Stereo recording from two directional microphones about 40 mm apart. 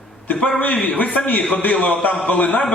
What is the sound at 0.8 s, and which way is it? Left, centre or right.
A man's voice, left.